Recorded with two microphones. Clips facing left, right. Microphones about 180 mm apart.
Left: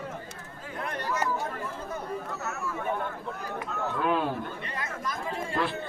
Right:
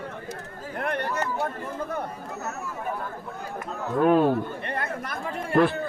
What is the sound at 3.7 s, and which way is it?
Chatter, 45° right (ahead or behind).